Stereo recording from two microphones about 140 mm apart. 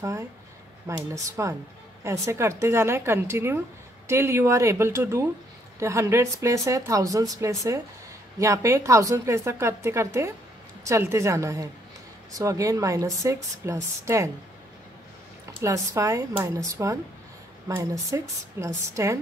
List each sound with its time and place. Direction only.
0.8 s speech: 20° right (ahead or behind)
15.6 s speech: 20° right (ahead or behind)